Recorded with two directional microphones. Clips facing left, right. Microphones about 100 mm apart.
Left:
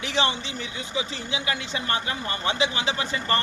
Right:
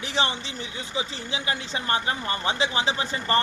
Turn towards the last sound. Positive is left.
turn(degrees=-30)  # may be behind; listen again after turning